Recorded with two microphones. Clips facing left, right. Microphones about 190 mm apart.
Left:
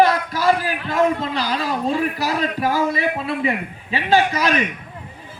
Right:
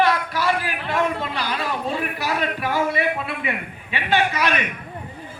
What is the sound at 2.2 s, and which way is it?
A man's voice, 40° left (ahead or behind).